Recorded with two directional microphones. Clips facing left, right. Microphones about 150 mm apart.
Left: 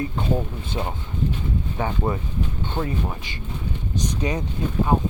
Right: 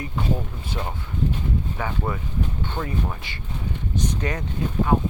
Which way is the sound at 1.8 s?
25° left (ahead or behind).